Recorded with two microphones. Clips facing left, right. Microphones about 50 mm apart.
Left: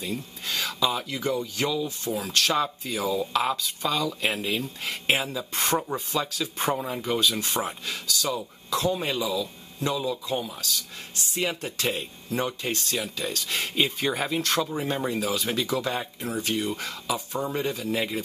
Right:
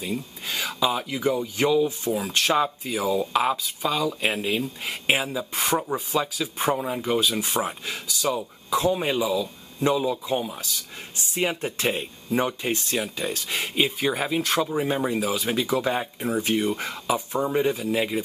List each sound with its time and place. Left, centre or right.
0.0 s a man's voice: centre